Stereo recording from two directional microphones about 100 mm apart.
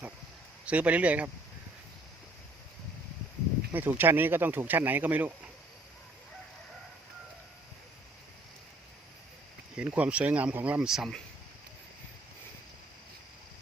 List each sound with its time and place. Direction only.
0.6 s speech: 15° right (ahead or behind)
3.7 s speech: 20° right (ahead or behind)
9.7 s speech: 15° right (ahead or behind)